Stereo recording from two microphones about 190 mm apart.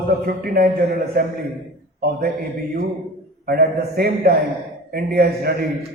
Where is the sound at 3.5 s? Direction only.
55° right (ahead or behind).